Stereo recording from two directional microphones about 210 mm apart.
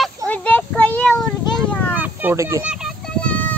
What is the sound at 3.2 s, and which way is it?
Child singing, 5° left (ahead or behind).